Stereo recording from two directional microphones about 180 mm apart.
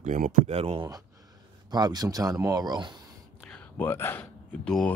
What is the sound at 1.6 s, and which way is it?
Speech, 25° right (ahead or behind).